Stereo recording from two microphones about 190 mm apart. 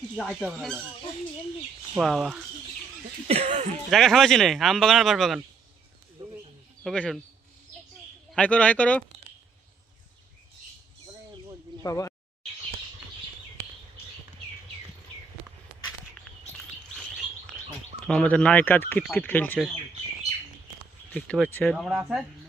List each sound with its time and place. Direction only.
0.2 s speech: 10° left (ahead or behind)
2.0 s speech: centre (ahead or behind)
3.2 s speech: 35° right (ahead or behind)
3.8 s speech: centre (ahead or behind)
6.8 s speech: centre (ahead or behind)
8.3 s speech: 5° left (ahead or behind)
11.8 s speech: 15° left (ahead or behind)
18.0 s speech: 5° left (ahead or behind)
21.1 s speech: 5° left (ahead or behind)